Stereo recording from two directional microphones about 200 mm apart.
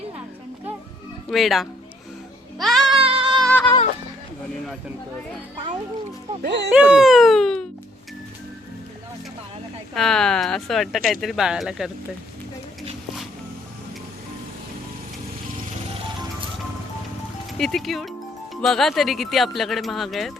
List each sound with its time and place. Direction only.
1.3 s speech: centre (ahead or behind)
2.6 s child singing: centre (ahead or behind)
2.9 s music: 30° right (ahead or behind)
3.3 s a sound: 5° left (ahead or behind)
6.4 s speech: 55° right (ahead or behind)
6.7 s speech: 5° right (ahead or behind)
9.9 s speech: centre (ahead or behind)
17.6 s speech: centre (ahead or behind)